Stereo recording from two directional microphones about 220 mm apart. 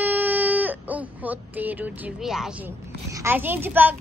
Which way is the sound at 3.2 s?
10° right (ahead or behind).